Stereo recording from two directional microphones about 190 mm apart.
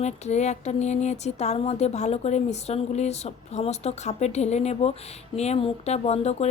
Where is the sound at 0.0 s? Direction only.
35° left (ahead or behind).